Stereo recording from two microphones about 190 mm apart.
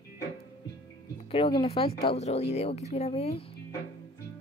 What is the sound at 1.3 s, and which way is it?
Music, 25° left (ahead or behind).